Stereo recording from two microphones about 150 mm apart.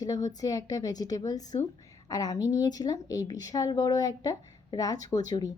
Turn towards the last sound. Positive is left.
turn(degrees=25)  # may be behind; listen again after turning